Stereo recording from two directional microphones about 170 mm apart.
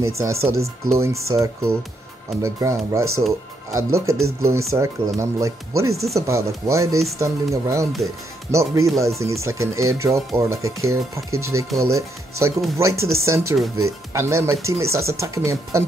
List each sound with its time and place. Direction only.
0.1 s speech: 15° right (ahead or behind)